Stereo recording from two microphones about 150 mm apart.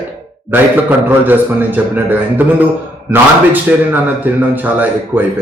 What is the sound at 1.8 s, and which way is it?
Speech, 15° right (ahead or behind).